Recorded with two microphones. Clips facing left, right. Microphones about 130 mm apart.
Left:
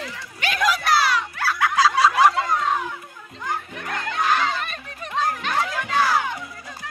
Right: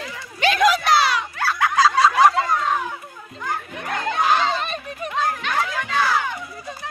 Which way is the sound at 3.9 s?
20° right (ahead or behind).